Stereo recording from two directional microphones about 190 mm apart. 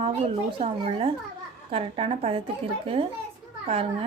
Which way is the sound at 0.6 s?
30° right (ahead or behind).